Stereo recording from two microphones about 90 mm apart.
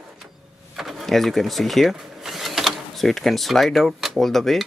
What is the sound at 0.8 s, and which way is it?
Sewing machine, centre (ahead or behind).